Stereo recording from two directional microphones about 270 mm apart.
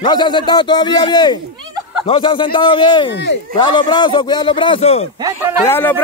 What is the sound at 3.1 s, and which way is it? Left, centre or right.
Speech, left.